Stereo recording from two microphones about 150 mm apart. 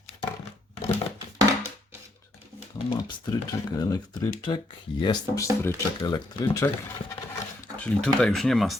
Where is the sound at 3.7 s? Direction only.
25° left (ahead or behind).